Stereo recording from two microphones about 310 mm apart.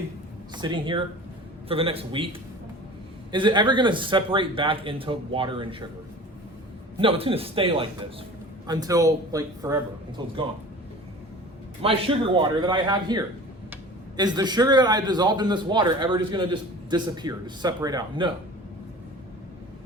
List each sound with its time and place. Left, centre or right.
0.5 s a man's voice: centre
3.3 s a man's voice: centre
7.0 s a man's voice: centre
11.8 s a man's voice: centre